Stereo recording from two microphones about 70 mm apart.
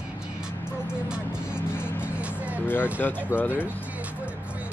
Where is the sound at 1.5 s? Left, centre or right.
Left.